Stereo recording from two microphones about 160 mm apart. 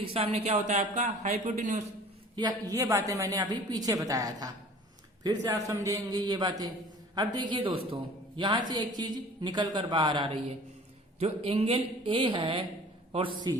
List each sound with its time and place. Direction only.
0.0 s speech: 35° right (ahead or behind)
2.3 s a woman's voice: 25° right (ahead or behind)